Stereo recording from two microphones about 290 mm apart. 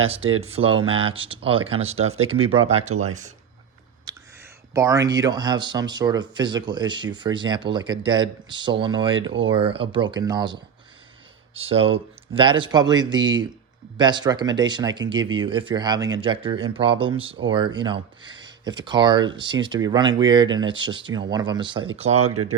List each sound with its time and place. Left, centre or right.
0.0 s speech: centre
4.1 s a sound: centre
4.7 s speech: centre
22.3 s speech: right